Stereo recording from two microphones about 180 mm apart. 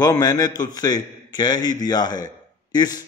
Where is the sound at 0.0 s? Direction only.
20° left (ahead or behind).